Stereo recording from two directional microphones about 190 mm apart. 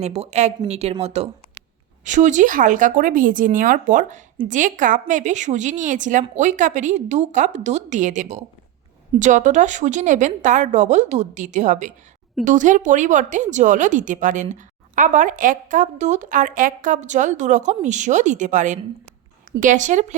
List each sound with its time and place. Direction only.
0.0 s a woman's voice: 35° right (ahead or behind)